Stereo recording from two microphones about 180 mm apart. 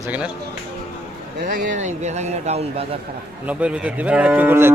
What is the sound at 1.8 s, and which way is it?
Speech, 40° right (ahead or behind).